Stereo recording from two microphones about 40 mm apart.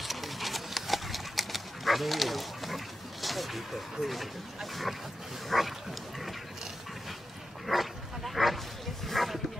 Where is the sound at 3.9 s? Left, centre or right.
Centre.